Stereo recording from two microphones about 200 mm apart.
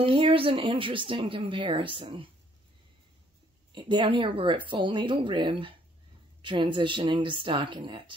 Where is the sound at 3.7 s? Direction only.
25° right (ahead or behind).